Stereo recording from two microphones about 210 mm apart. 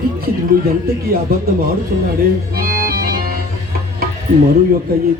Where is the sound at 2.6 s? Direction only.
45° right (ahead or behind).